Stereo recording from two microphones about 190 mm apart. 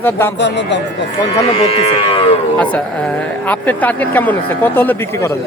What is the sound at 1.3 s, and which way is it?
Livestock, 30° left (ahead or behind).